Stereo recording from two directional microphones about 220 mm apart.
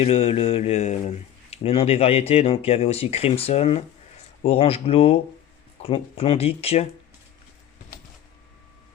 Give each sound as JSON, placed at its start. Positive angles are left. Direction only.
{"t": 0.0, "sound": "speech", "side_deg": 25}